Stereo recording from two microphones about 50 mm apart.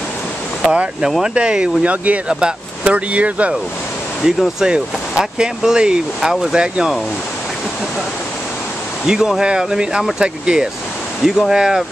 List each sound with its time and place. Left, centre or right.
0.7 s speech: centre
4.2 s speech: centre
9.0 s speech: centre